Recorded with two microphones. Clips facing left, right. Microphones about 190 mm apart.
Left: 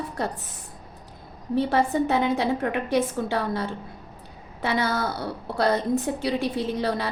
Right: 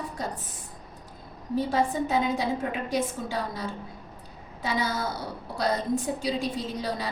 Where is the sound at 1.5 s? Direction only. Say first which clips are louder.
Left 3 dB; 65° left (ahead or behind).